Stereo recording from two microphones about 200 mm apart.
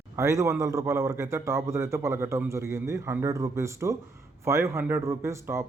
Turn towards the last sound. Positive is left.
turn(degrees=-15)  # may be behind; listen again after turning